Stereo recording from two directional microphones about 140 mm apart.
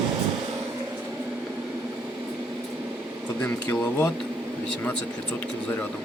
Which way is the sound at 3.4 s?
15° left (ahead or behind).